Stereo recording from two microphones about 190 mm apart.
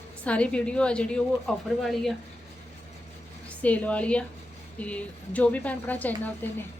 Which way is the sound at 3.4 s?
5° left (ahead or behind).